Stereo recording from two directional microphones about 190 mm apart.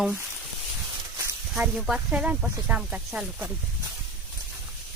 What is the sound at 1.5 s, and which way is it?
Speech, 5° right (ahead or behind).